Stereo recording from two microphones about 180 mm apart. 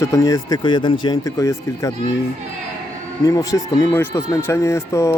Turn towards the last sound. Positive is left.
turn(degrees=15)  # may be behind; listen again after turning